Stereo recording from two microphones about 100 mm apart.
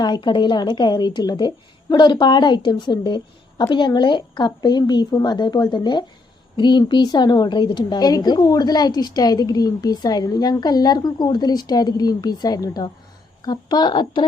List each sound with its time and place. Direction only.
0.0 s a woman's voice: 50° left (ahead or behind)